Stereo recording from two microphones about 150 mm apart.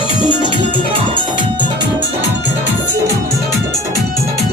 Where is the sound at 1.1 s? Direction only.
30° right (ahead or behind).